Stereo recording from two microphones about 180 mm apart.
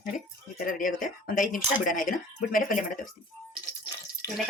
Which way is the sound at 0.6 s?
50° left (ahead or behind).